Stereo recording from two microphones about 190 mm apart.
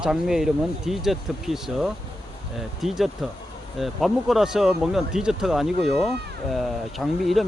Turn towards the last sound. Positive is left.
turn(degrees=0)  # may be behind; listen again after turning